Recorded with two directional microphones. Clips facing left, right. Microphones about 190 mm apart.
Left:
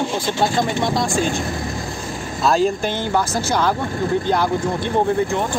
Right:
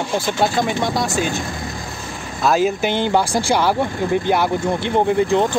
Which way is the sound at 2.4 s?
5° right (ahead or behind).